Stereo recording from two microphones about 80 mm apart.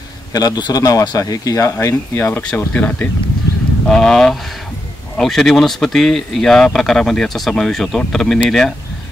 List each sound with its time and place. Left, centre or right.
0.3 s speech: left
2.1 s speech: left
2.7 s speech: centre